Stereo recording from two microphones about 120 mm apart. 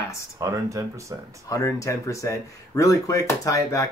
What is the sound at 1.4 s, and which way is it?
Speech, 25° left (ahead or behind).